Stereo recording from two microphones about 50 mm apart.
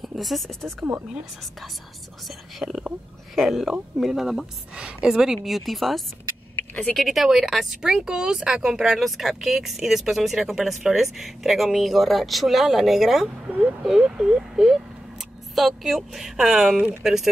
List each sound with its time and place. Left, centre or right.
0.0 s speech: centre
2.2 s speech: centre
6.7 s speech: left
7.0 s speech: centre